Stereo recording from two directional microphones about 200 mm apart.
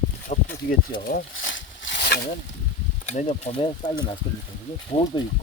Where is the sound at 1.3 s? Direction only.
70° left (ahead or behind).